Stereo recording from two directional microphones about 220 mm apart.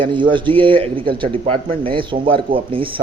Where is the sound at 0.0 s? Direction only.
20° right (ahead or behind).